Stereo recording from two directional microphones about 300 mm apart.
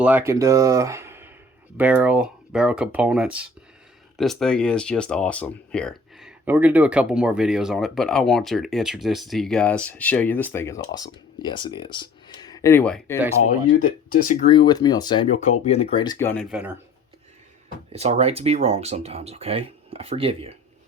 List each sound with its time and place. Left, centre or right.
0.0 s speech: centre
13.7 s speech: left
14.5 s speech: centre
17.9 s speech: right